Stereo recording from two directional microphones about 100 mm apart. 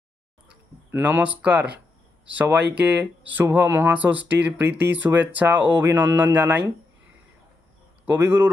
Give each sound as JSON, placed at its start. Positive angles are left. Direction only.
{"t": 0.9, "sound": "speech", "side_deg": -20}
{"t": 8.0, "sound": "a man's voice", "side_deg": -20}